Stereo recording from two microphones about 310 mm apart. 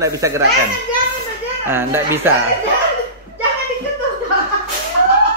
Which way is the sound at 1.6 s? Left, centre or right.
Centre.